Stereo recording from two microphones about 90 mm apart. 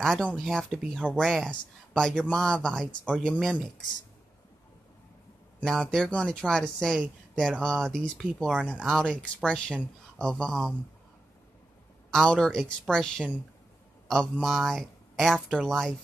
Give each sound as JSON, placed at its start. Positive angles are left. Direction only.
{"t": 0.0, "sound": "speech", "side_deg": 5}
{"t": 5.7, "sound": "speech", "side_deg": 5}
{"t": 12.1, "sound": "speech", "side_deg": 5}